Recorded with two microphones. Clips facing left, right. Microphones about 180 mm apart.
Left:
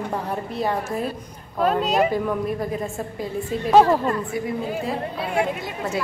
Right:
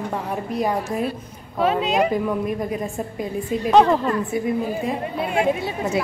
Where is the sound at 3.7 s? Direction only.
10° left (ahead or behind).